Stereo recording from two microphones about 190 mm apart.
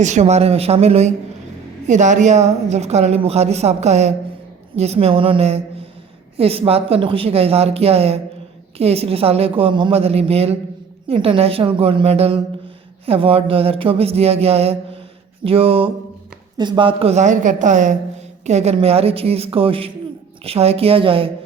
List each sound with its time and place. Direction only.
0.0 s a woman's voice: 40° right (ahead or behind)
15.4 s a sound: 30° right (ahead or behind)
16.6 s a woman's voice: 25° right (ahead or behind)